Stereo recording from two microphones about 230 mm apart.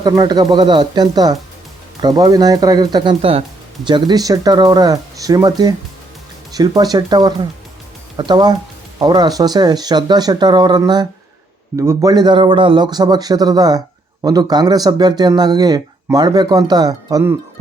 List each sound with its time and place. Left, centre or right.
0.0 s speech: centre